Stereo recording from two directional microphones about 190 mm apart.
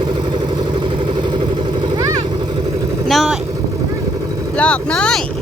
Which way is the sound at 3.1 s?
Centre (ahead or behind).